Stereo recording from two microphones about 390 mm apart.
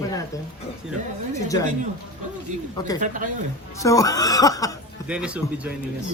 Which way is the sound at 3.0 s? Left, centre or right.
Centre.